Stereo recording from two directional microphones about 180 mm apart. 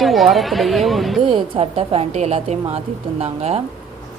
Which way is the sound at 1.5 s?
35° right (ahead or behind).